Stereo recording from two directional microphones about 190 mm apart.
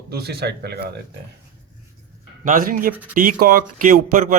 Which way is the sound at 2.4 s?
45° right (ahead or behind).